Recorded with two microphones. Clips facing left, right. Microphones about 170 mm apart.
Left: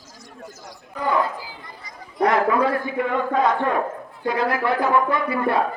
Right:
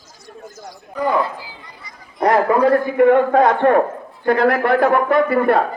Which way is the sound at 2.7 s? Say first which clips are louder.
Right 11 dB; 55° right (ahead or behind).